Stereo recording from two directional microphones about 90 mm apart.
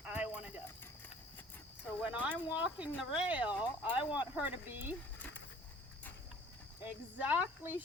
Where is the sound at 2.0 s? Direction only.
15° right (ahead or behind).